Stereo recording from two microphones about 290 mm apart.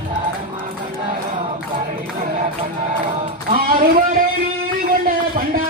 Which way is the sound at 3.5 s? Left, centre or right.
Right.